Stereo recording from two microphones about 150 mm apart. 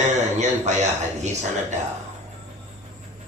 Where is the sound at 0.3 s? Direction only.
50° right (ahead or behind).